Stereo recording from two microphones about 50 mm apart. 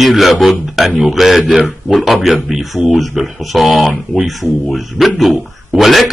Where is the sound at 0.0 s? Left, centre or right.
Centre.